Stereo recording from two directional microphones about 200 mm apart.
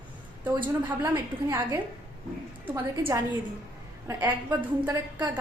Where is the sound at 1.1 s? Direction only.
15° right (ahead or behind).